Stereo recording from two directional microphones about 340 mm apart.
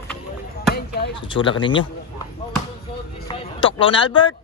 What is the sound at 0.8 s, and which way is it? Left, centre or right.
Speech, left.